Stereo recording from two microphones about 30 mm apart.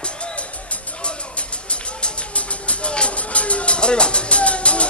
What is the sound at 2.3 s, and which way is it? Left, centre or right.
Music, left.